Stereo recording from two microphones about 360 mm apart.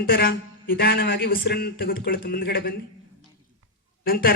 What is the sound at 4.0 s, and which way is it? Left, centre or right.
Speech, left.